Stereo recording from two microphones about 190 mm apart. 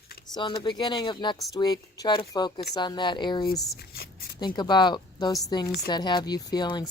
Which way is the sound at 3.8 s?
55° left (ahead or behind).